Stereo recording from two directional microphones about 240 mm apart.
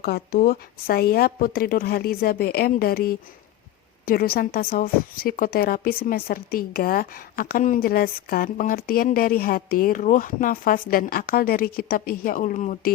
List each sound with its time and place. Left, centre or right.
0.0 s a woman's voice: left